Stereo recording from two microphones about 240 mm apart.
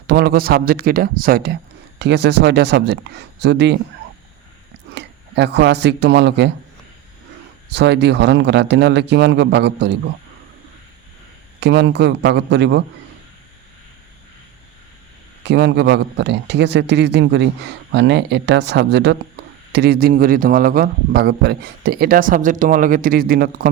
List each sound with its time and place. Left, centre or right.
0.1 s a man's voice: right
4.9 s speech: right
7.7 s a man's voice: right
11.6 s a man's voice: right
15.4 s a man's voice: right